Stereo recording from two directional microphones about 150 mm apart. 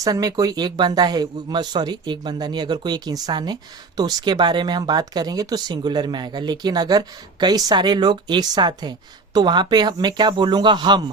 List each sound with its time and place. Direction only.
0.0 s speech: 25° right (ahead or behind)